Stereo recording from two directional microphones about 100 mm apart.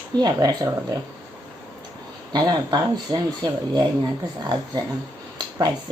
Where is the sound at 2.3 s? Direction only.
45° right (ahead or behind).